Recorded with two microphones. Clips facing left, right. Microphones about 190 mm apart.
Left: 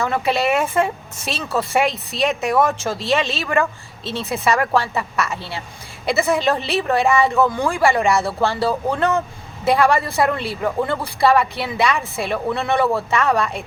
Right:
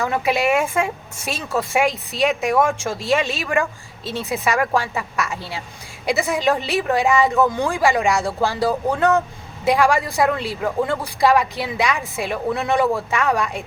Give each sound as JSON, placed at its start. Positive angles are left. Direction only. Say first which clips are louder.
{"t": 0.0, "sound": "speech", "louder": "even", "side_deg": -15}